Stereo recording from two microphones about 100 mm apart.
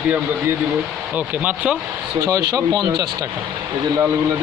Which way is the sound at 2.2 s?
35° right (ahead or behind).